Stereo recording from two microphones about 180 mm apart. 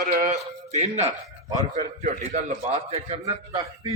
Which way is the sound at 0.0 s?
45° right (ahead or behind).